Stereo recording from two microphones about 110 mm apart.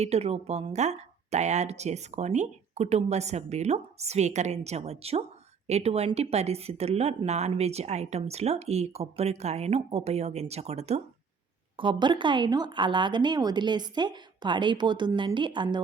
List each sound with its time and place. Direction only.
0.0 s speech: 75° right (ahead or behind)
7.3 s speech: 85° right
11.8 s speech: 45° right (ahead or behind)